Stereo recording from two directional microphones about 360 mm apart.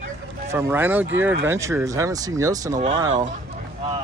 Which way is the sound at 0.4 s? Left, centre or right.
Centre.